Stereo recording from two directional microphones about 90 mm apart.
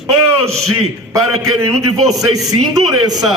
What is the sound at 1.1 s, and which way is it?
A man's voice, 35° right (ahead or behind).